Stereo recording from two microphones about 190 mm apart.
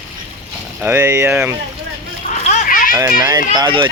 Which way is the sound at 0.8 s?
10° right (ahead or behind).